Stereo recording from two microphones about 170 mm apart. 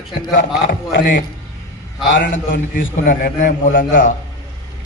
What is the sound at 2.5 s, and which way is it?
A man's voice, 55° left (ahead or behind).